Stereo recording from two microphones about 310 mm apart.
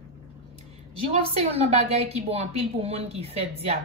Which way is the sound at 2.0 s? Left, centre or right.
Centre.